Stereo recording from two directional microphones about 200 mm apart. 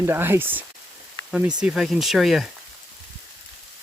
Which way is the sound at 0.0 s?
10° right (ahead or behind).